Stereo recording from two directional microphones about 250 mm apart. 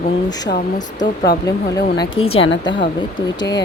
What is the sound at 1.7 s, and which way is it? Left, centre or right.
Speech, centre.